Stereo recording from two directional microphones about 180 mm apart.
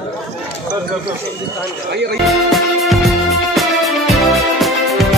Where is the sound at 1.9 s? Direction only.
70° right (ahead or behind).